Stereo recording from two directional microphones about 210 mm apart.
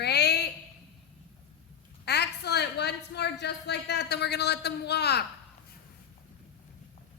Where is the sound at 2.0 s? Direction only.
50° left (ahead or behind).